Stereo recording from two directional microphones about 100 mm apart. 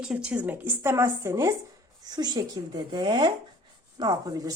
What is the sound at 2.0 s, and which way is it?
Speech, 40° right (ahead or behind).